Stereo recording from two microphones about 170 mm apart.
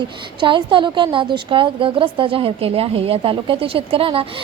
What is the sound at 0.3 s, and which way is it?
A woman's voice, 30° right (ahead or behind).